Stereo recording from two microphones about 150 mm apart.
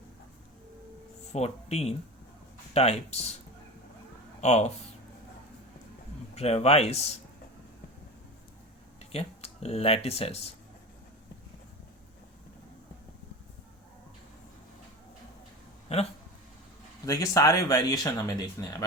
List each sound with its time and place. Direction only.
1.3 s speech: 45° left (ahead or behind)
4.4 s speech: 50° left (ahead or behind)
6.3 s speech: 45° left (ahead or behind)
9.0 s speech: 45° left (ahead or behind)
15.9 s a sound: 45° left (ahead or behind)
17.1 s speech: 20° left (ahead or behind)